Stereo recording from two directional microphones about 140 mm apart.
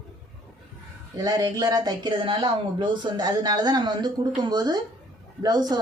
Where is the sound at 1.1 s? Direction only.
30° right (ahead or behind).